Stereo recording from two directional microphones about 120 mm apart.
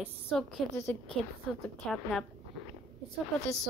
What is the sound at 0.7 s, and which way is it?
Speech, 20° left (ahead or behind).